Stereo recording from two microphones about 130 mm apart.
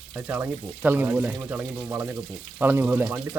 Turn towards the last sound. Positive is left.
turn(degrees=-10)  # may be behind; listen again after turning